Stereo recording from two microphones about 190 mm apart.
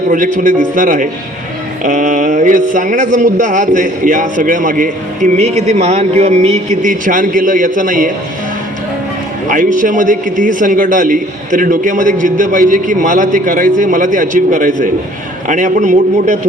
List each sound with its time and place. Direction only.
0.1 s a man's voice: 40° right (ahead or behind)
9.5 s a man's voice: 45° right (ahead or behind)